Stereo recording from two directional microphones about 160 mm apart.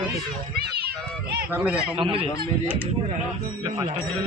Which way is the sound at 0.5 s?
80° right.